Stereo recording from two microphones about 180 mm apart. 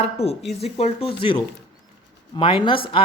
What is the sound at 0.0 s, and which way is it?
Speech, 35° left (ahead or behind).